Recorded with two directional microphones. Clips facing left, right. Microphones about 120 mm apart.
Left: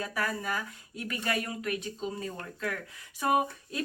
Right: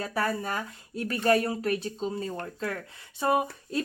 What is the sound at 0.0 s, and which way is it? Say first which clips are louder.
A woman's voice: right 4 dB; 35° right (ahead or behind).